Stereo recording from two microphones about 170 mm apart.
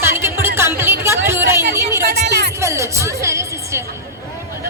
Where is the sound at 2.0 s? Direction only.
70° right (ahead or behind).